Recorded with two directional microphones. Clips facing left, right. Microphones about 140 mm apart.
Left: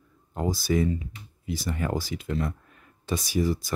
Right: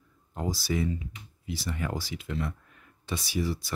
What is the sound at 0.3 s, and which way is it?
Speech, 50° left (ahead or behind).